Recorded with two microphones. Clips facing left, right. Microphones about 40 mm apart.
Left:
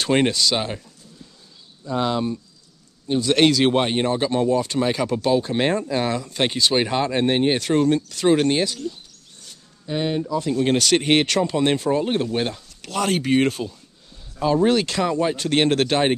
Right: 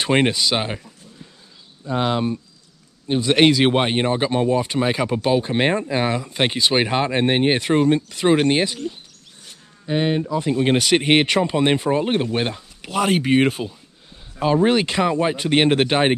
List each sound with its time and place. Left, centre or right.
0.0 s speech: centre